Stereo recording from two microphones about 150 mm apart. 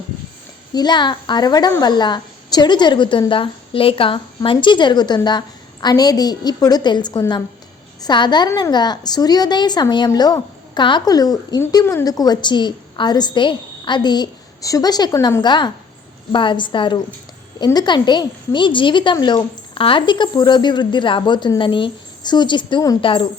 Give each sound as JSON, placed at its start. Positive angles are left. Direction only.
{"t": 0.7, "sound": "a woman's voice", "side_deg": 30}